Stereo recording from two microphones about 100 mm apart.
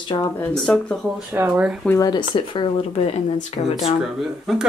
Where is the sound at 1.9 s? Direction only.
35° left (ahead or behind).